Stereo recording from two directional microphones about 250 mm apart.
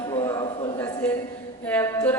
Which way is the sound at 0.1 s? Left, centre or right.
Centre.